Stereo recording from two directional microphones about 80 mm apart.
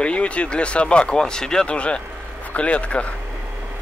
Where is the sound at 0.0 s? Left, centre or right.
Centre.